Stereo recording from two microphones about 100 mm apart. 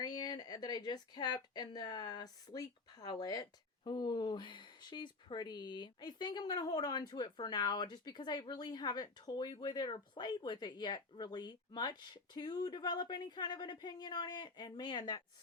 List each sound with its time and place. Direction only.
0.0 s speech: 45° left (ahead or behind)